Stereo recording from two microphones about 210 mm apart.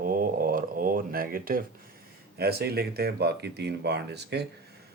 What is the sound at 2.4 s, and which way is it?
Speech, 50° right (ahead or behind).